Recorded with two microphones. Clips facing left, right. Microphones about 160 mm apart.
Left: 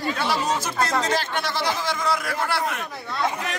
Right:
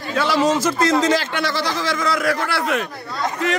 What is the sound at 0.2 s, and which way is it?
A man's voice, 90° right.